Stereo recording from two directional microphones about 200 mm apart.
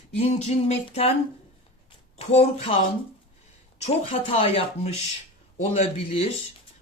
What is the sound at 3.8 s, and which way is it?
Speech, 30° left (ahead or behind).